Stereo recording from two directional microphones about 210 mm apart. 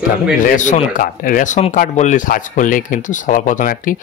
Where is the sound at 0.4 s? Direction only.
35° left (ahead or behind).